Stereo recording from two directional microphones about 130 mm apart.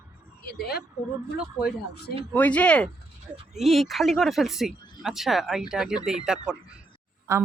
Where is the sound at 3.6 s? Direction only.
Centre (ahead or behind).